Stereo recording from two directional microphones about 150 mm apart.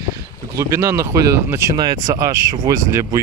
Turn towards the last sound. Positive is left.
turn(degrees=-20)  # may be behind; listen again after turning